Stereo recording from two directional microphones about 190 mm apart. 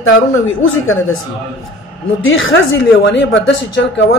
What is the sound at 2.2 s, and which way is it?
A woman's voice, 90° left.